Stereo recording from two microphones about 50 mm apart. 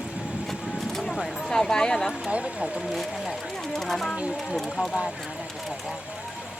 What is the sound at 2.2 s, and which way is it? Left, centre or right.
Speech, right.